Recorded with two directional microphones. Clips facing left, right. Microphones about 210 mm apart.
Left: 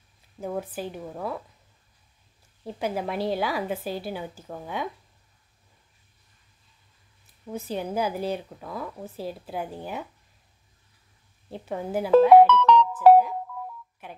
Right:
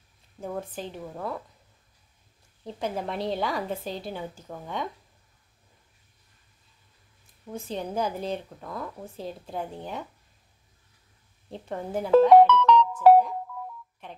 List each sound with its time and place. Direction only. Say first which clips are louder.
0.4 s speech: left 3 dB; 5° left (ahead or behind)
2.6 s a woman's voice: left 2 dB; 5° left (ahead or behind)
7.5 s speech: left 2 dB; 5° left (ahead or behind)
11.5 s speech: left 2 dB; 5° left (ahead or behind)
12.6 s music: left 1 dB; 55° left (ahead or behind)
14.0 s telephone dialing: left 1 dB; 5° left (ahead or behind)